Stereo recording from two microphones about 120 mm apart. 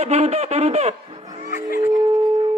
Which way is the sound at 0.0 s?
65° right (ahead or behind).